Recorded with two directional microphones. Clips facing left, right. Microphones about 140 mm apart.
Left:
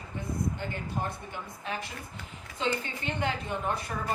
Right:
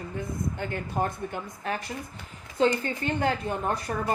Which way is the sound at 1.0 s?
50° right (ahead or behind).